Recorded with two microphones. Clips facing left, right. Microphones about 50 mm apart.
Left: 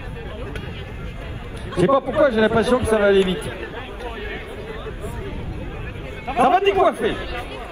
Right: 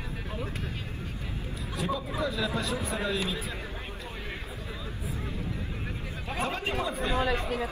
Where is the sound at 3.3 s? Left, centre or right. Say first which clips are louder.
Left 8 dB; left.